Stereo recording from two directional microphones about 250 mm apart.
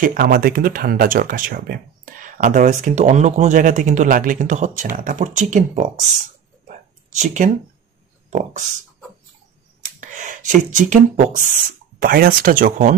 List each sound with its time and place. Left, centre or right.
0.0 s speech: right
6.7 s a sound: right
8.3 s speech: right
9.8 s speech: right